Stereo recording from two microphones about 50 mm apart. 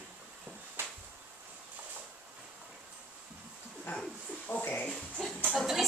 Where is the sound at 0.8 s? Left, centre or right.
Right.